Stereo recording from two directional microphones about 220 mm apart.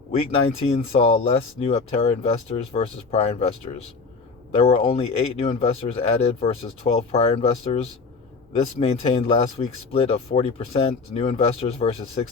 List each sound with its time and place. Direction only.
0.1 s speech: 25° left (ahead or behind)